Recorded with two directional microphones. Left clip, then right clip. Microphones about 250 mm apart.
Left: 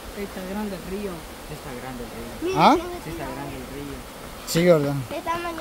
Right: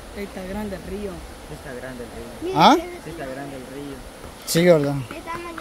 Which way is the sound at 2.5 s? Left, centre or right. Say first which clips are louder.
Right 2 dB; centre.